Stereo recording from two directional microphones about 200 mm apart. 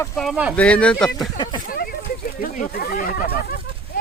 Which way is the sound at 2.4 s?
50° left (ahead or behind).